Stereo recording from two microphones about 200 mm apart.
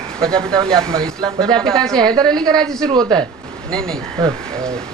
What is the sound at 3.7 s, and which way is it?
Speech, 5° left (ahead or behind).